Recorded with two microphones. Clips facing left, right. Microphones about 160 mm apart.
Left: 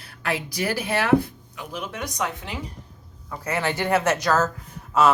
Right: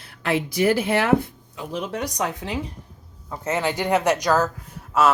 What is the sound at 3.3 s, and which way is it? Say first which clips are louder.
Speech: right 2 dB; 20° right (ahead or behind).